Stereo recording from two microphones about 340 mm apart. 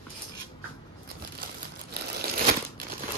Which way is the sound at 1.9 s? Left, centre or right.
Right.